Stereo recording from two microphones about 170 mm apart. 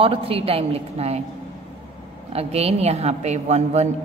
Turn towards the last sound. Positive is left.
turn(degrees=-40)  # may be behind; listen again after turning